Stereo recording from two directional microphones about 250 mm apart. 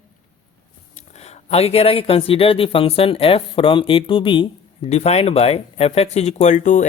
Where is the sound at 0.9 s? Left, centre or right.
Left.